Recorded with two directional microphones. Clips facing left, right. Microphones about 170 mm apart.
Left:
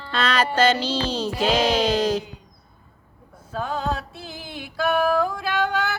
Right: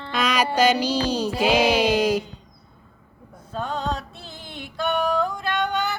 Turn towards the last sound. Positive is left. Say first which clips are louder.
# left 1 dB
turn(degrees=5)  # may be behind; listen again after turning